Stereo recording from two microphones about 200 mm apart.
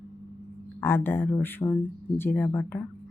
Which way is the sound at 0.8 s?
10° left (ahead or behind).